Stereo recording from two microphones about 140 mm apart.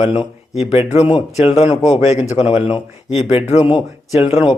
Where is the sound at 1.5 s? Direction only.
45° left (ahead or behind).